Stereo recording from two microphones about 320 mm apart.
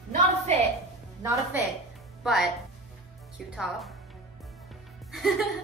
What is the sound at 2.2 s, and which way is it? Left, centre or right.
Speech, centre.